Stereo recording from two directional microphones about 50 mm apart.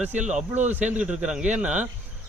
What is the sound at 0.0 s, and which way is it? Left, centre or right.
Speech, right.